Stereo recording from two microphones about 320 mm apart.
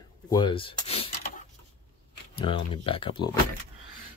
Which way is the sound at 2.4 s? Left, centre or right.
Centre.